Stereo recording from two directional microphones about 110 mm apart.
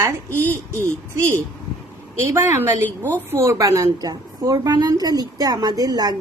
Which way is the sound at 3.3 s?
30° right (ahead or behind).